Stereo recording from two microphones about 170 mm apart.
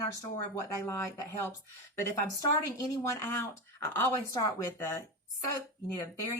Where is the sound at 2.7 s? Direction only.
15° left (ahead or behind).